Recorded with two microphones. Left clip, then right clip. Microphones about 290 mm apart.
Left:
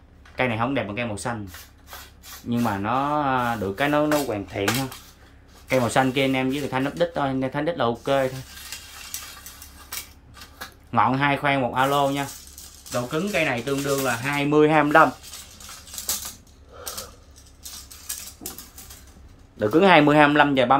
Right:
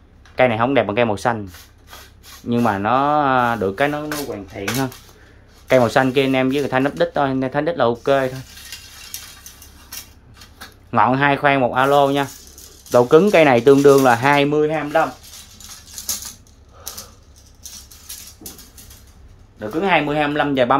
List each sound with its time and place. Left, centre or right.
0.4 s speech: centre
2.5 s speech: centre
5.7 s speech: centre
10.9 s speech: centre
12.9 s speech: centre
14.5 s speech: centre
19.6 s speech: left; by 20.7 s centre